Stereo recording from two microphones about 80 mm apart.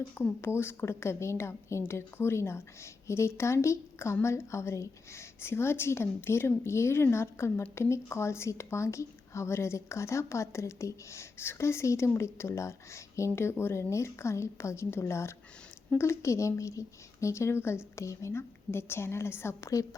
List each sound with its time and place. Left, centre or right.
0.4 s speech: left